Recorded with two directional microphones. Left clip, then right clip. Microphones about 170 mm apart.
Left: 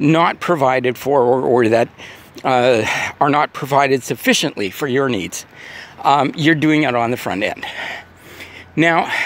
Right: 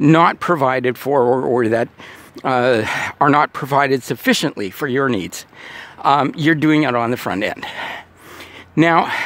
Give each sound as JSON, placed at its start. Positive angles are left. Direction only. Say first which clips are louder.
{"t": 0.0, "sound": "speech", "louder": "right 2 dB", "side_deg": -40}